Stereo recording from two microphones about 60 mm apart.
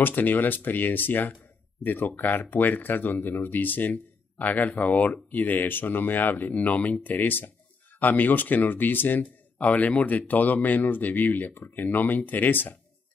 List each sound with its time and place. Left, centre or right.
0.0 s speech: left